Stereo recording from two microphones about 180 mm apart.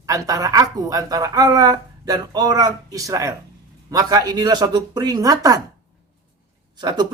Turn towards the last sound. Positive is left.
turn(degrees=-25)  # may be behind; listen again after turning